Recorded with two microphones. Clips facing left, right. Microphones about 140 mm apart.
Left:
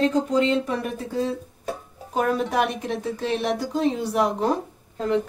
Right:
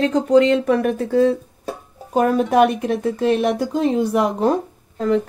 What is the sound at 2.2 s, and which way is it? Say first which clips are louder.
Speech: right 7 dB; 45° right (ahead or behind).